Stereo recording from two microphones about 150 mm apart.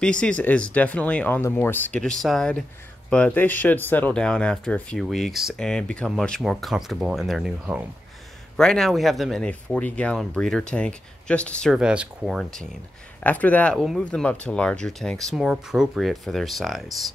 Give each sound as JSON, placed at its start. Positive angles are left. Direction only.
{"t": 0.0, "sound": "speech", "side_deg": 5}
{"t": 11.7, "sound": "speech", "side_deg": -5}